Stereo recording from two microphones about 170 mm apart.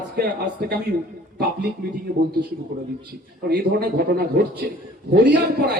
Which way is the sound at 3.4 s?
65° right (ahead or behind).